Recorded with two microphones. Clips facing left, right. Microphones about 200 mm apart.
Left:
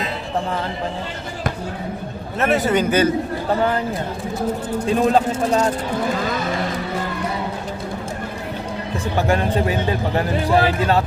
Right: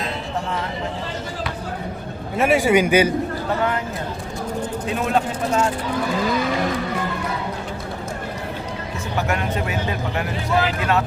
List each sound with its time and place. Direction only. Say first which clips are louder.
2.4 s a man's voice: right 1 dB; 10° right (ahead or behind)
4.9 s a man's voice: left 6 dB; 35° left (ahead or behind)
9.1 s a man's voice: left 4 dB; 30° left (ahead or behind)